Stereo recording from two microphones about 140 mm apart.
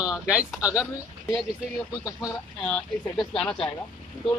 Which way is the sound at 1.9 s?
25° left (ahead or behind).